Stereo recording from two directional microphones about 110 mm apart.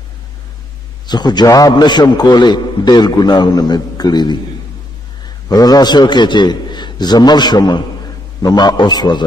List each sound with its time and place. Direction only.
1.0 s a man's voice: 40° left (ahead or behind)
5.5 s a man's voice: 35° left (ahead or behind)